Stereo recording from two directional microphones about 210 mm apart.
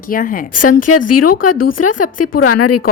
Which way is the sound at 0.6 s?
90° left.